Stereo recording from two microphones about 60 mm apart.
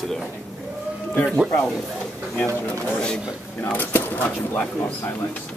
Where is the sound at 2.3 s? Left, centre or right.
Left.